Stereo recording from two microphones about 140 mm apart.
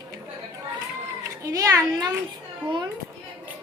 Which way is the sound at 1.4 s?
25° right (ahead or behind).